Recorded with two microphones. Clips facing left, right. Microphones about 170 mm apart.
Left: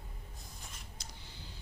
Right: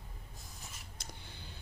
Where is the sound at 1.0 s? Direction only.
55° right (ahead or behind).